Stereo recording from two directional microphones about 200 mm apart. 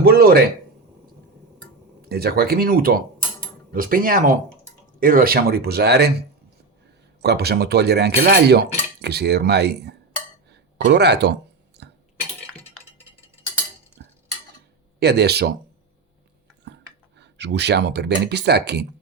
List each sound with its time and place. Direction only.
0.0 s a sound: 50° right (ahead or behind)
2.0 s speech: 50° right (ahead or behind)
7.2 s dishes: 55° right (ahead or behind)
14.0 s stir: 55° right (ahead or behind)
14.9 s speech: 55° right (ahead or behind)
17.2 s dishes: 60° right (ahead or behind)